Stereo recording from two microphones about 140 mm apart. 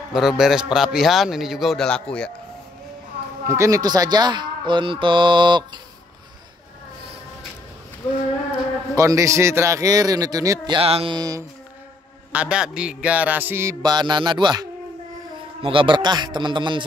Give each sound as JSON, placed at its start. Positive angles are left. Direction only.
{"t": 0.1, "sound": "a man's voice", "side_deg": -5}
{"t": 3.4, "sound": "speech", "side_deg": -20}
{"t": 8.9, "sound": "a man's voice", "side_deg": -25}
{"t": 10.8, "sound": "speech", "side_deg": -40}
{"t": 11.1, "sound": "a man's voice", "side_deg": -25}
{"t": 12.3, "sound": "a man's voice", "side_deg": -10}